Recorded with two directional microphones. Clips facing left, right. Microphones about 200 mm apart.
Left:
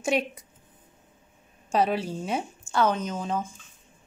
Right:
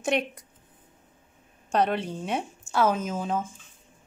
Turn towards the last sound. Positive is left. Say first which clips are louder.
# right 1 dB
turn(degrees=-5)  # may be behind; listen again after turning